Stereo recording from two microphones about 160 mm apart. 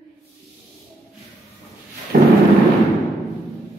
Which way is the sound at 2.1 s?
60° right (ahead or behind).